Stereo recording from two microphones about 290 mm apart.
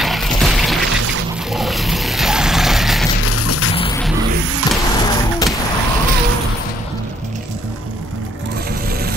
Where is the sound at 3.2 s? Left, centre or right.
Left.